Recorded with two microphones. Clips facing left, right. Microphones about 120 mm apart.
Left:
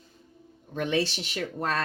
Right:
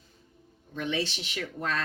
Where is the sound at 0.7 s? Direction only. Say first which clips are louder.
Left 4 dB; 45° left (ahead or behind).